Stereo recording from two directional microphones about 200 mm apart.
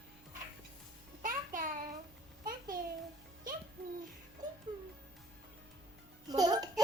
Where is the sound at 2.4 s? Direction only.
45° right (ahead or behind).